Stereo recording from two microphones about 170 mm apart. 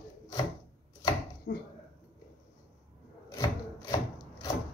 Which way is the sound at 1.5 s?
90° left.